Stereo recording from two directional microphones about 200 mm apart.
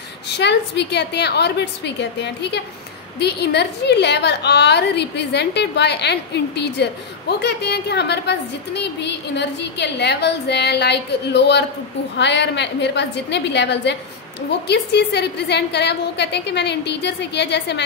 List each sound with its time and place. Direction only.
0.4 s a woman's voice: 60° left (ahead or behind)